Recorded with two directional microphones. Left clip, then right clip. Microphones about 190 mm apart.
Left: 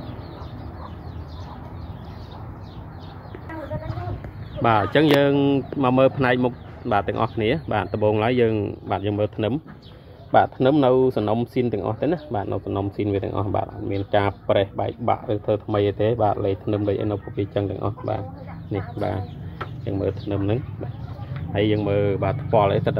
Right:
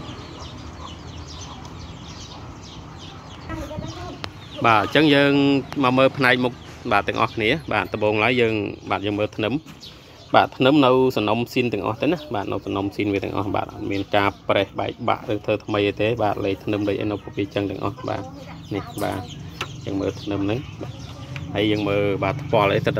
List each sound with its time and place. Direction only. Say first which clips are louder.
4.6 s speech: right 2 dB; centre (ahead or behind)
10.3 s speech: right 1 dB; 15° right (ahead or behind)